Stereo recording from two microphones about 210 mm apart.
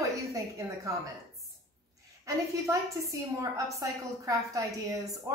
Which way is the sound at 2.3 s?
15° right (ahead or behind).